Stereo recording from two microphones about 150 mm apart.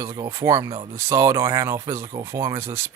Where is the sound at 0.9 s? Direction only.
20° right (ahead or behind).